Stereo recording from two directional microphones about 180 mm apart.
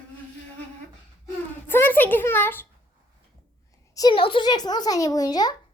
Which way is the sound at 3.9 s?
25° left (ahead or behind).